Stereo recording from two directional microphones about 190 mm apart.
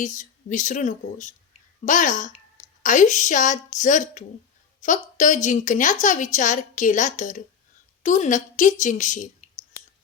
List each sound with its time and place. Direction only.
0.0 s a woman's voice: 40° left (ahead or behind)